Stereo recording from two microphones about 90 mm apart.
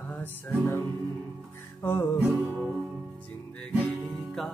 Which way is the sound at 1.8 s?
25° left (ahead or behind).